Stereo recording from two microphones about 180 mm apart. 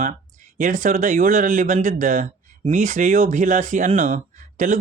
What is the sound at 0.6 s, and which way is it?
Speech, 45° right (ahead or behind).